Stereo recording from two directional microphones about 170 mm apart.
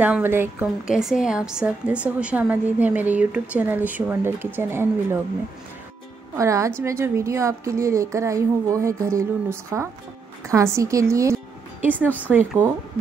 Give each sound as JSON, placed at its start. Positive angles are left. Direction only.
{"t": 0.0, "sound": "a woman's voice", "side_deg": -10}
{"t": 6.3, "sound": "a woman's voice", "side_deg": -15}
{"t": 12.0, "sound": "a woman's voice", "side_deg": 10}
{"t": 12.3, "sound": "a woman's voice", "side_deg": -10}